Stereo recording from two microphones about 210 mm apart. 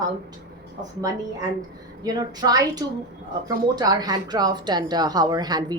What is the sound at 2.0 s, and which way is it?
A woman's voice, 20° right (ahead or behind).